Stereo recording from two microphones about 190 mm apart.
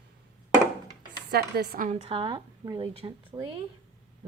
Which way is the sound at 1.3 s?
55° right (ahead or behind).